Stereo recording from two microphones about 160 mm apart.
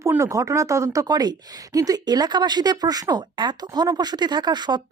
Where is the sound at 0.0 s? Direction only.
20° right (ahead or behind).